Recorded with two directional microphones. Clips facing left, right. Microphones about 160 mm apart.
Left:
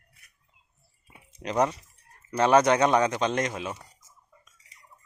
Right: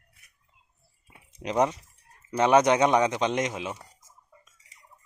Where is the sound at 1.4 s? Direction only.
20° right (ahead or behind).